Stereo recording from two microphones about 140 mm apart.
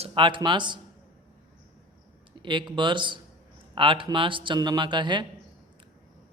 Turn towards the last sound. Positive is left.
turn(degrees=-35)  # may be behind; listen again after turning